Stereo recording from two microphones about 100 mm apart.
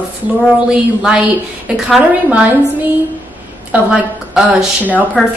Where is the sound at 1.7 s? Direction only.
5° right (ahead or behind).